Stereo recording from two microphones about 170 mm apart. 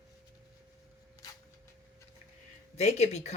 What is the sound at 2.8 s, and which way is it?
Speech, 40° left (ahead or behind).